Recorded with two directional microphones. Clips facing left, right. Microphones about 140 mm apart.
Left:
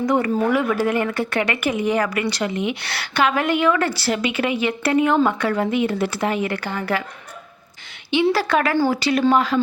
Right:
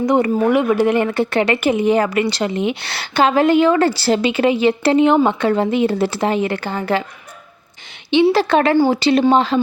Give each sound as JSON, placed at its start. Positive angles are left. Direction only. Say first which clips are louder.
{"t": 0.0, "sound": "speech", "louder": "right 4 dB", "side_deg": -20}
{"t": 8.1, "sound": "speech", "louder": "right 5 dB", "side_deg": -25}